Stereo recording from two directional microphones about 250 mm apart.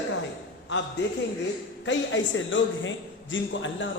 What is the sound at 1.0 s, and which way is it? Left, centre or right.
A woman's voice, left.